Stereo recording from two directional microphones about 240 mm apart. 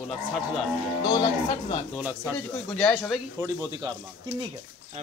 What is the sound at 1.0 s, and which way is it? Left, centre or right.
Speech, centre.